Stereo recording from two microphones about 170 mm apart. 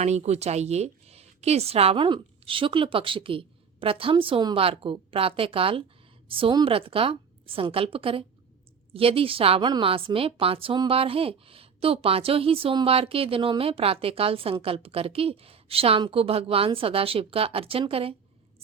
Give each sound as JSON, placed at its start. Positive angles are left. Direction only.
{"t": 0.0, "sound": "a woman's voice", "side_deg": -40}